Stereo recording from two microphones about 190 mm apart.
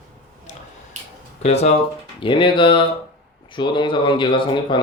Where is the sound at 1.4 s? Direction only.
35° left (ahead or behind).